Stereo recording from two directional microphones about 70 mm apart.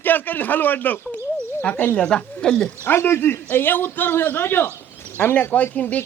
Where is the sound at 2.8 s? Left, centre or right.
Left.